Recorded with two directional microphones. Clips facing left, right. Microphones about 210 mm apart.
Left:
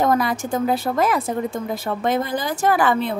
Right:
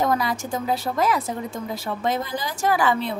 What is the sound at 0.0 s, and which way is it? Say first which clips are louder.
A woman's voice: left 3 dB; 55° left (ahead or behind).